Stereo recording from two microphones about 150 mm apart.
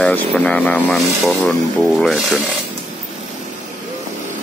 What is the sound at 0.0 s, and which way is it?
Speech, 10° left (ahead or behind).